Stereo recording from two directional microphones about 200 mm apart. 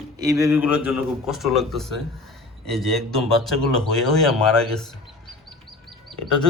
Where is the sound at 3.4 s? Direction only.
Centre (ahead or behind).